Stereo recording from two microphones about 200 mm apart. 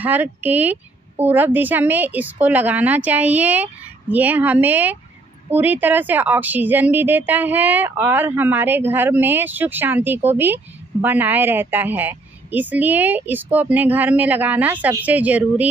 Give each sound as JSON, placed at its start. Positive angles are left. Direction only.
{"t": 0.0, "sound": "a woman's voice", "side_deg": -10}